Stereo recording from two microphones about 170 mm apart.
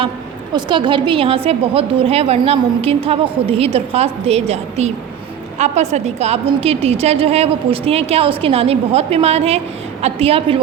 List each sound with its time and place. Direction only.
0.5 s a woman's voice: 30° right (ahead or behind)